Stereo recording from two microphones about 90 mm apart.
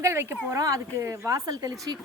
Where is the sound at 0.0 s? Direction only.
30° right (ahead or behind).